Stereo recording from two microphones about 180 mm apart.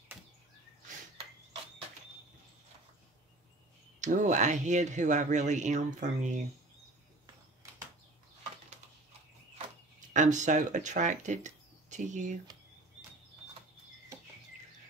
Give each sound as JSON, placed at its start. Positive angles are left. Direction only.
{"t": 4.0, "sound": "speech", "side_deg": -45}
{"t": 10.1, "sound": "speech", "side_deg": -40}